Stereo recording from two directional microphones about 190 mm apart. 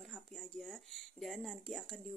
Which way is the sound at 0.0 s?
Centre (ahead or behind).